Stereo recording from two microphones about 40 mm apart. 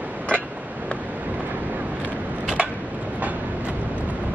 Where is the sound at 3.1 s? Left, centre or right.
Right.